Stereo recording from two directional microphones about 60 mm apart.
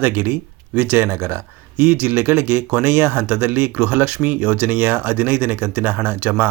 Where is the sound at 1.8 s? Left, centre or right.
Right.